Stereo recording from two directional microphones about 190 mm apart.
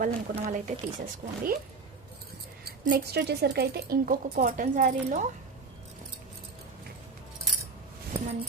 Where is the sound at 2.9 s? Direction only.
60° right (ahead or behind); by 5.3 s 45° right (ahead or behind).